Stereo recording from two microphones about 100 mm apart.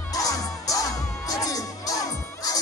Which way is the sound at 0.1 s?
35° left (ahead or behind).